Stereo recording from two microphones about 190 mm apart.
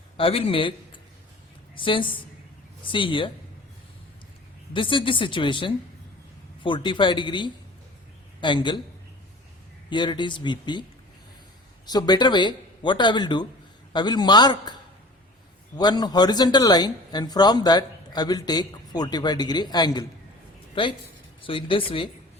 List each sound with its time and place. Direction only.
0.2 s speech: 30° left (ahead or behind)
1.7 s speech: 25° left (ahead or behind)
4.7 s speech: 25° left (ahead or behind)
9.9 s speech: 25° left (ahead or behind)
11.9 s speech: 20° left (ahead or behind)
15.8 s speech: 20° left (ahead or behind)
21.4 s speech: 25° left (ahead or behind)